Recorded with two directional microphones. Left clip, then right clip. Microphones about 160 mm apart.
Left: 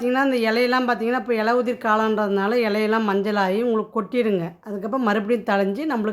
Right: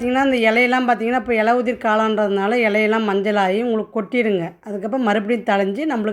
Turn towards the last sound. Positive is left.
turn(degrees=-10)  # may be behind; listen again after turning